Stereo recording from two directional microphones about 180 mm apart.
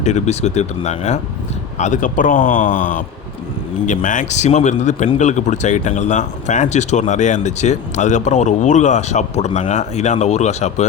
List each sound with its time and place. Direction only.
0.0 s a man's voice: 40° left (ahead or behind)